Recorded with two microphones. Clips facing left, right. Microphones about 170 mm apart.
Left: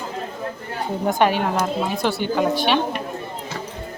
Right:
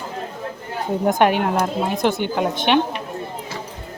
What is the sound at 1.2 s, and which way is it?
Speech, 55° right (ahead or behind).